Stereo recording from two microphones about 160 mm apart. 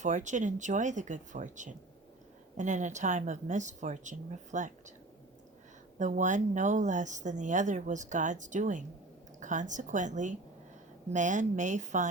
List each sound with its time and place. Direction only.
0.0 s speech: 50° right (ahead or behind)
6.0 s speech: 50° right (ahead or behind)